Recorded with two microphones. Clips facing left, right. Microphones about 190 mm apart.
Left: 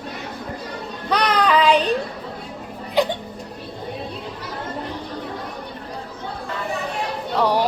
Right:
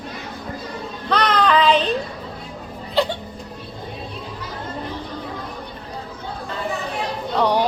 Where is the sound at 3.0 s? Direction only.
15° left (ahead or behind).